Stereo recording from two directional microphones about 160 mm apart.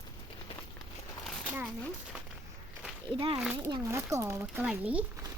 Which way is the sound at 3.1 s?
35° right (ahead or behind).